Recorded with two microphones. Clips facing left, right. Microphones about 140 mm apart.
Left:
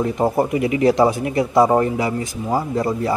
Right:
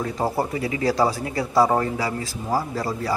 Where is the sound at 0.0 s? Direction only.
20° left (ahead or behind).